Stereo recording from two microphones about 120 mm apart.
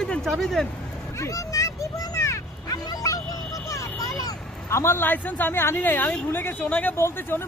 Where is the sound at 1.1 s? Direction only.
25° left (ahead or behind).